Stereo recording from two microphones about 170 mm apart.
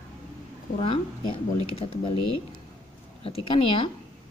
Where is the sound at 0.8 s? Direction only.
35° left (ahead or behind).